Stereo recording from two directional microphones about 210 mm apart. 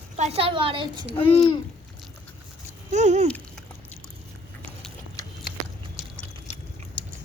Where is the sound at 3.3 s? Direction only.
10° left (ahead or behind).